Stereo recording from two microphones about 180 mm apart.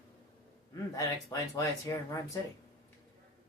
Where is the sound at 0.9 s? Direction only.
20° left (ahead or behind).